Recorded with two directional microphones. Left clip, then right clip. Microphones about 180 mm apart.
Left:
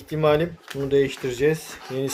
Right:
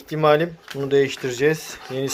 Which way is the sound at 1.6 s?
20° right (ahead or behind).